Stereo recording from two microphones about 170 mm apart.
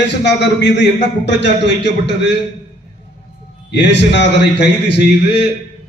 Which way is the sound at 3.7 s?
90° left.